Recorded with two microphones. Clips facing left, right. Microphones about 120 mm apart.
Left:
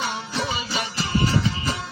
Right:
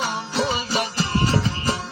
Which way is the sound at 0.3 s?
35° right (ahead or behind).